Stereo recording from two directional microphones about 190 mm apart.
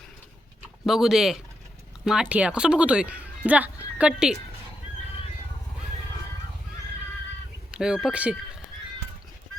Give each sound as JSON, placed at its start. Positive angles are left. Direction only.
{"t": 0.9, "sound": "speech", "side_deg": 0}
{"t": 7.7, "sound": "speech", "side_deg": -5}